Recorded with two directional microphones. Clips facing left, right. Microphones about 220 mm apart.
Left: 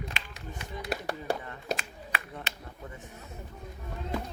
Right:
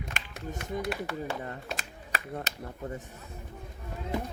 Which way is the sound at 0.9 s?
40° left (ahead or behind).